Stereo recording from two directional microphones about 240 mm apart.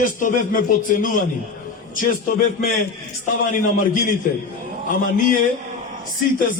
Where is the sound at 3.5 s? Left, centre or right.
Left.